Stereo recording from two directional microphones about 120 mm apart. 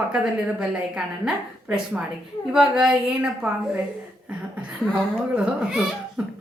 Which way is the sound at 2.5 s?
5° right (ahead or behind).